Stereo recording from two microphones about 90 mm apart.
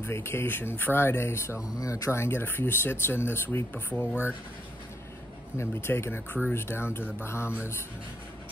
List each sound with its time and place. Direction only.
0.0 s speech: 30° left (ahead or behind)
5.6 s speech: 30° left (ahead or behind)